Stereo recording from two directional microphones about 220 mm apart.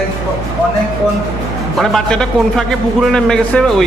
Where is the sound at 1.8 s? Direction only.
Centre (ahead or behind).